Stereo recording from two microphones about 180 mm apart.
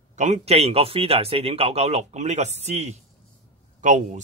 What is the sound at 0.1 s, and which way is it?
Speech, 40° right (ahead or behind).